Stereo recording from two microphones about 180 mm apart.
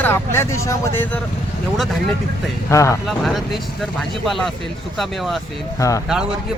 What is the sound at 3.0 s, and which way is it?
Speech, centre (ahead or behind).